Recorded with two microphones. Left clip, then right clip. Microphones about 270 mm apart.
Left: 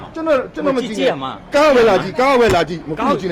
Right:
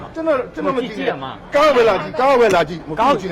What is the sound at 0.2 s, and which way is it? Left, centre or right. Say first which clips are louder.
Speech: left 2 dB; left.